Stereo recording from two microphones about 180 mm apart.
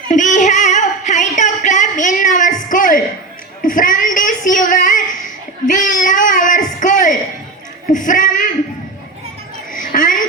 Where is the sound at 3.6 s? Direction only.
45° left (ahead or behind).